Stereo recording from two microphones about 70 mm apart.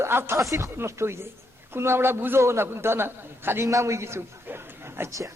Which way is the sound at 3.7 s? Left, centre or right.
Right.